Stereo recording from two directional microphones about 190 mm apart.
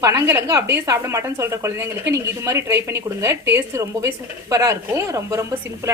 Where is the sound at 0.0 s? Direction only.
15° right (ahead or behind).